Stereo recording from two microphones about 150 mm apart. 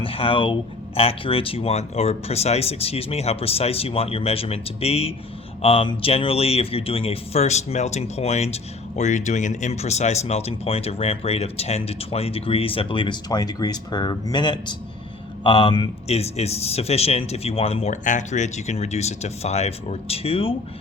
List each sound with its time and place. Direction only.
0.0 s a man's voice: 35° left (ahead or behind)